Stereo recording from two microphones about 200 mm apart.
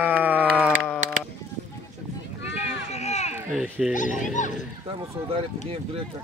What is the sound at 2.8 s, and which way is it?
Run, 35° left (ahead or behind).